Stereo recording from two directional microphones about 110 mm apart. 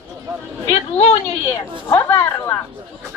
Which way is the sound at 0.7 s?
65° left (ahead or behind).